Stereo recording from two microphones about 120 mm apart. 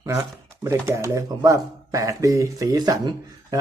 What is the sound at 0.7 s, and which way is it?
A man's voice, 25° right (ahead or behind).